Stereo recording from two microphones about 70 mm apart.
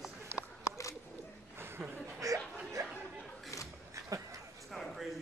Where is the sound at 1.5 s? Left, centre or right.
Right.